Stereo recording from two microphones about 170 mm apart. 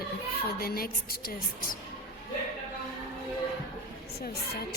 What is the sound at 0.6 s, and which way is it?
Speech, 60° left (ahead or behind).